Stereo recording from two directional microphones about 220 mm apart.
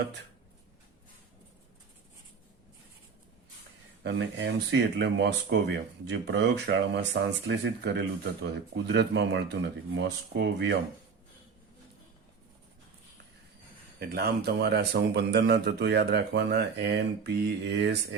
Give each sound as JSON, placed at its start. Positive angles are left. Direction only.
{"t": 4.0, "sound": "speech", "side_deg": -50}
{"t": 14.0, "sound": "speech", "side_deg": -45}